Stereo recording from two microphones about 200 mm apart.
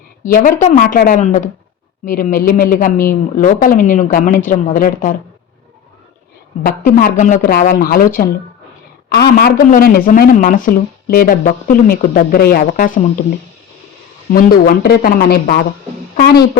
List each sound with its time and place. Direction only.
0.3 s a woman's voice: 45° left (ahead or behind)
6.6 s speech: 45° left (ahead or behind)
14.3 s speech: 45° left (ahead or behind)